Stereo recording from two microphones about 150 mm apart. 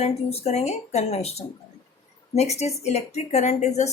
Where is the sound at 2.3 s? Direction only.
45° left (ahead or behind).